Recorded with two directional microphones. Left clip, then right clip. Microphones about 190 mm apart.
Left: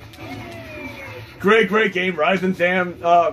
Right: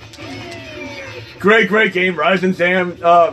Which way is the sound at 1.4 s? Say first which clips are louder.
Right 4 dB; 45° right (ahead or behind).